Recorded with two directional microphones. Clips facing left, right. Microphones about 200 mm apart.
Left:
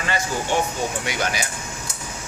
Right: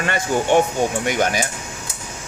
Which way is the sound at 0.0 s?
55° right (ahead or behind).